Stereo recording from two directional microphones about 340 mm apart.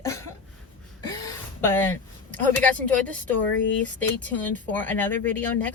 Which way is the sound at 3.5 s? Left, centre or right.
Left.